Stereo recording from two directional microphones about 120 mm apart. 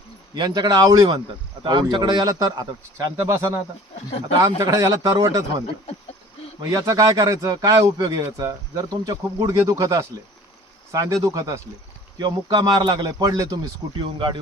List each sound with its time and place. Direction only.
0.3 s speech: 40° right (ahead or behind)
1.6 s a man's voice: 40° right (ahead or behind)
6.6 s a man's voice: 30° right (ahead or behind)
12.1 s speech: 35° right (ahead or behind)
14.0 s speech: 45° right (ahead or behind)